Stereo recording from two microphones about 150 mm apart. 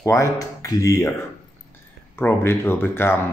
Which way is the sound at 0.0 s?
20° left (ahead or behind).